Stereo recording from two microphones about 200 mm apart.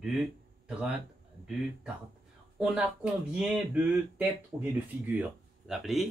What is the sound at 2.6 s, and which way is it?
Speech, 5° right (ahead or behind).